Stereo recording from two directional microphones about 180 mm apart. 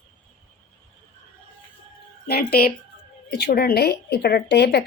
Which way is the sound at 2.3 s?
60° left (ahead or behind).